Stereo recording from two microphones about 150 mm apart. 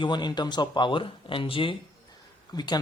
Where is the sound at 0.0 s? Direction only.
30° left (ahead or behind).